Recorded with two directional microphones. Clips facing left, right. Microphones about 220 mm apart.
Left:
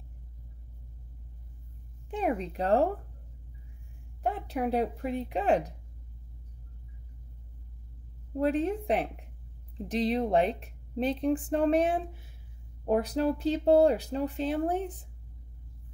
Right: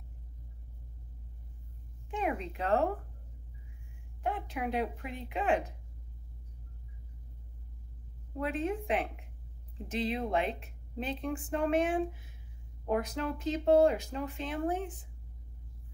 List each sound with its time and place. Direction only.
2.0 s speech: 35° left (ahead or behind)
4.2 s speech: 40° left (ahead or behind)
8.4 s speech: 35° left (ahead or behind)